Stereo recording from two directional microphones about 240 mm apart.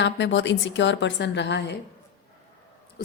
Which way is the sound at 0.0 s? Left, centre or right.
Left.